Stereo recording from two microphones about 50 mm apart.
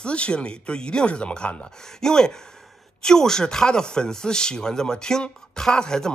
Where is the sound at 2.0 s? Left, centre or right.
Centre.